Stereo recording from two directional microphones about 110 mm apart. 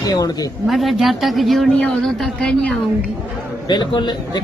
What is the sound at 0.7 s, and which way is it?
A woman's voice, centre (ahead or behind).